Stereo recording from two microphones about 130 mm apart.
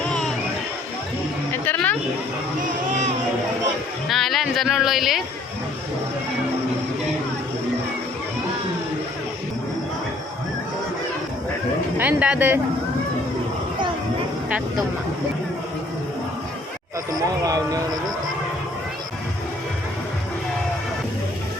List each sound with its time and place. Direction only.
1.6 s a sound: 15° left (ahead or behind)
4.1 s speech: centre (ahead or behind)
11.9 s speech: 10° right (ahead or behind)
17.1 s speech: 30° right (ahead or behind)